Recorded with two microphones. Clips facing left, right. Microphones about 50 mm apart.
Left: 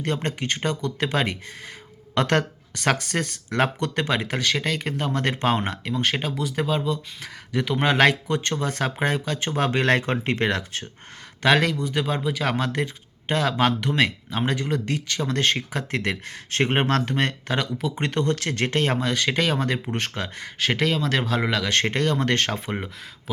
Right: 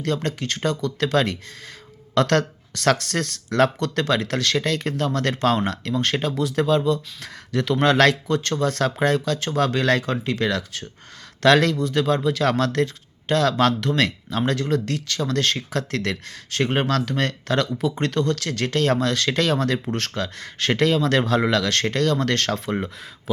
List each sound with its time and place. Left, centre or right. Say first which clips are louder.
0.0 s speech: right 2 dB; left
5.9 s speech: right 1 dB; centre; by 10.8 s left
11.4 s speech: right 3 dB; centre
16.5 s speech: even; left
17.7 s speech: right 4 dB; centre
18.0 s speech: left 1 dB; left
18.9 s speech: right 2 dB; centre
20.6 s speech: right 3 dB; centre
21.7 s speech: right 1 dB; left